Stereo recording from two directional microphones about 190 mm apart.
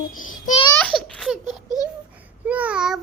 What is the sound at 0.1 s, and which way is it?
Speech, 45° left (ahead or behind).